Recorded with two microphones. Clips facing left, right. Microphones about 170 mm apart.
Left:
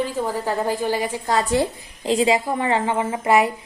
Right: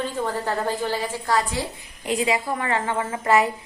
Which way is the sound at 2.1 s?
25° left (ahead or behind).